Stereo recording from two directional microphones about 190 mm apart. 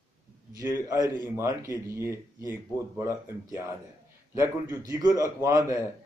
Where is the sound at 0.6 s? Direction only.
15° right (ahead or behind).